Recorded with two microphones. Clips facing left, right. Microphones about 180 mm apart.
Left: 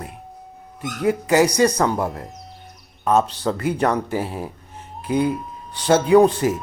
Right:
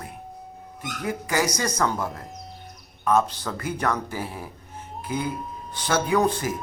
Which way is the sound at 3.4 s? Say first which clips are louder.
Left 9 dB; 35° left (ahead or behind).